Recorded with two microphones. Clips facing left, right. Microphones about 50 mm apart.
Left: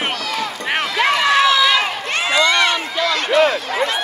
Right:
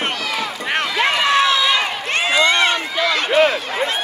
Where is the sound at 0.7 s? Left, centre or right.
Centre.